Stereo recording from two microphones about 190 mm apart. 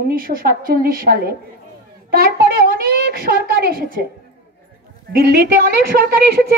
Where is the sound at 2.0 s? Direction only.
50° right (ahead or behind).